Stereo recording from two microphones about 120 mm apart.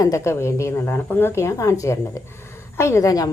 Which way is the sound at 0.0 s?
25° left (ahead or behind).